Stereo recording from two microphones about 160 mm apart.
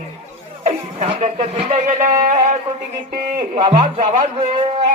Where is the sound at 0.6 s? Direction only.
45° right (ahead or behind).